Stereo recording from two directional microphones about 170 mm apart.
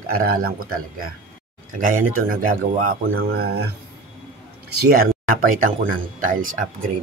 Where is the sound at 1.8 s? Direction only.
55° right (ahead or behind).